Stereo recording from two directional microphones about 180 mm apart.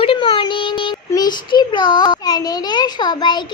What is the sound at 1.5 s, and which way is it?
A child's voice, 25° left (ahead or behind).